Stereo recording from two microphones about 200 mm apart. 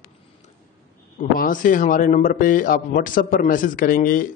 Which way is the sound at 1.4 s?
40° left (ahead or behind).